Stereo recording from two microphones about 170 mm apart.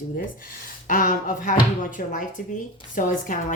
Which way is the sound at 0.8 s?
55° left (ahead or behind).